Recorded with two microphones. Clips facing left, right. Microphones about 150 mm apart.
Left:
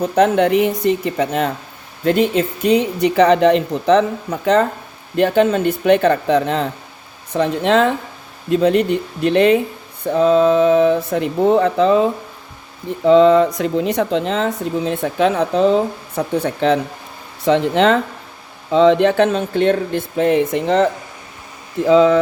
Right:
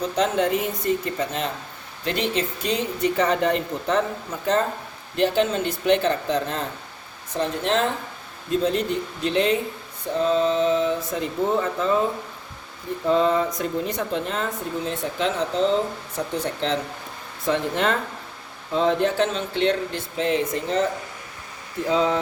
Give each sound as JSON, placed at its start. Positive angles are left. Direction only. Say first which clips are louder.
{"t": 0.0, "sound": "speech", "louder": "left 8 dB", "side_deg": 60}
{"t": 5.1, "sound": "speech", "louder": "left 7 dB", "side_deg": 55}
{"t": 13.1, "sound": "speech", "louder": "left 10 dB", "side_deg": 85}
{"t": 17.4, "sound": "speech", "louder": "left 9 dB", "side_deg": 90}
{"t": 21.8, "sound": "speech", "louder": "left 10 dB", "side_deg": 90}